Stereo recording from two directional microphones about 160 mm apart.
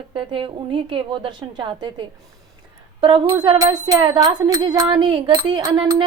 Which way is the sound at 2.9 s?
30° right (ahead or behind).